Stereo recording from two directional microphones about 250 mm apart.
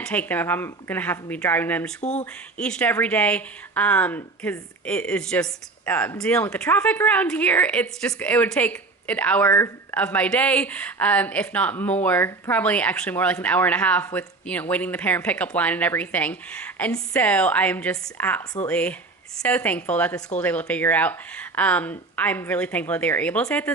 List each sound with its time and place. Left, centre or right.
0.0 s speech: centre
2.0 s speech: left
2.6 s speech: centre